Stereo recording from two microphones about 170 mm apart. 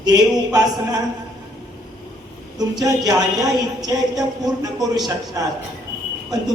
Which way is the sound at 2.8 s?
20° right (ahead or behind).